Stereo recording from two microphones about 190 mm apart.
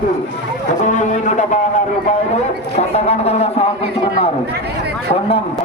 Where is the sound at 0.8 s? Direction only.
40° left (ahead or behind).